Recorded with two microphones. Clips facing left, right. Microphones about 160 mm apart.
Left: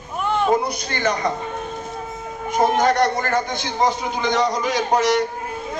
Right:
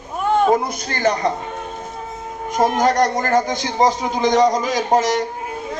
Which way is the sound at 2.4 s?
40° right (ahead or behind).